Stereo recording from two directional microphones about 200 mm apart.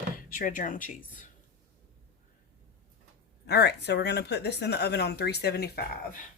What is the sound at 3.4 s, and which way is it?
Speech, 55° left (ahead or behind).